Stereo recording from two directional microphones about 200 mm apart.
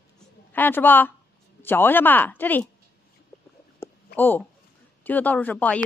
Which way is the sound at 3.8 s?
10° left (ahead or behind).